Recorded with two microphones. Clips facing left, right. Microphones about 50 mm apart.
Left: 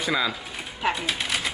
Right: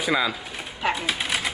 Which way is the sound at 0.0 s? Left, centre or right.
Centre.